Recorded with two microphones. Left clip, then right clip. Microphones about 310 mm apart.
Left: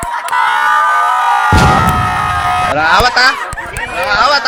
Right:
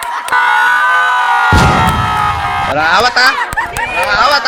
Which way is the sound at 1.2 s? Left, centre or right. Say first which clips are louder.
Even; centre.